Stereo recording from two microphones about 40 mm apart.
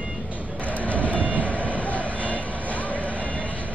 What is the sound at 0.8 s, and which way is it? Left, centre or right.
Vehicle, left.